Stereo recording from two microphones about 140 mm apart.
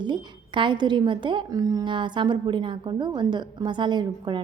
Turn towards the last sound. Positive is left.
turn(degrees=-35)  # may be behind; listen again after turning